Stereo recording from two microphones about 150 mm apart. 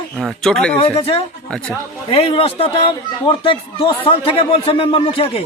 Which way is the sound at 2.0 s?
35° left (ahead or behind).